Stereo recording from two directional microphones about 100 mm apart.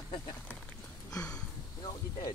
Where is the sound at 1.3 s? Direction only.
45° left (ahead or behind).